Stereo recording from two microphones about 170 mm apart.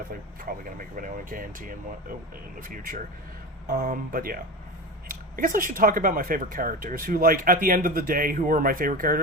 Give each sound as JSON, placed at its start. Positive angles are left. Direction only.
{"t": 0.4, "sound": "speech", "side_deg": -55}